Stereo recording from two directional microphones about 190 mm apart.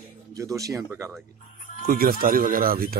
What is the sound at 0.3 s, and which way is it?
Speech, 15° right (ahead or behind).